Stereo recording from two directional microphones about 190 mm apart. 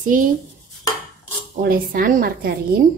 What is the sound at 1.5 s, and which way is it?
Speech, 50° right (ahead or behind).